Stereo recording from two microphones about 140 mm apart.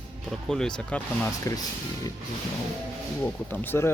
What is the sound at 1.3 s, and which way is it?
Speech, 20° left (ahead or behind).